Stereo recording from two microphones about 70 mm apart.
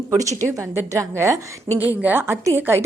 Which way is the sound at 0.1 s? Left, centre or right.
Right.